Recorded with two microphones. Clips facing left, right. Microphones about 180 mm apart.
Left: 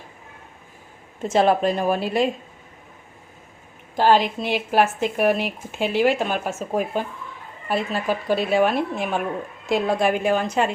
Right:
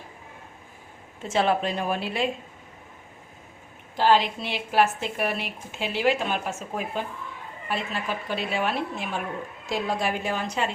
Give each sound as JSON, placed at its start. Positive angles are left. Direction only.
{"t": 1.3, "sound": "a woman's voice", "side_deg": 40}
{"t": 3.9, "sound": "speech", "side_deg": 45}